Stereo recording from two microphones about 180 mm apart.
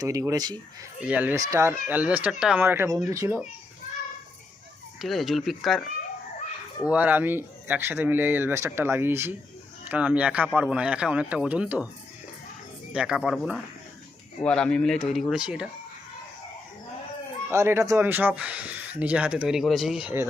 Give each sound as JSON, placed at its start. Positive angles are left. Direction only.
{"t": 0.0, "sound": "speech", "side_deg": -20}
{"t": 1.0, "sound": "speech", "side_deg": -10}
{"t": 4.9, "sound": "speech", "side_deg": 0}
{"t": 6.8, "sound": "speech", "side_deg": -10}
{"t": 12.9, "sound": "speech", "side_deg": -5}
{"t": 17.5, "sound": "speech", "side_deg": -15}